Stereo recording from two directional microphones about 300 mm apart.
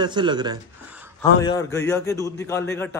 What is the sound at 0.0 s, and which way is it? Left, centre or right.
Speech, centre.